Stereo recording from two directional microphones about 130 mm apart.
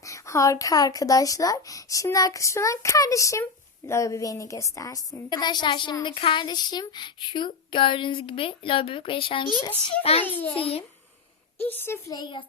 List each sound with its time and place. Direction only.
0.0 s a woman's voice: 25° left (ahead or behind); by 9.5 s 40° left (ahead or behind)
10.2 s speech: 15° left (ahead or behind)
10.6 s a child's voice: 50° left (ahead or behind)
11.6 s speech: 15° left (ahead or behind)
12.1 s a woman's voice: 40° left (ahead or behind)